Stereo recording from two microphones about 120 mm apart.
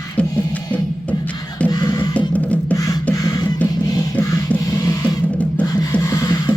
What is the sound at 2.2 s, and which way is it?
Music, 10° left (ahead or behind).